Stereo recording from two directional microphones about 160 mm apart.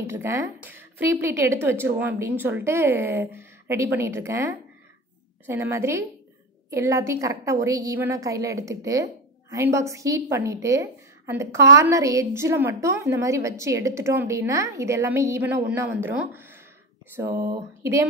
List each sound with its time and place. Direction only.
0.1 s a woman's voice: 15° right (ahead or behind)
5.5 s a woman's voice: 15° right (ahead or behind)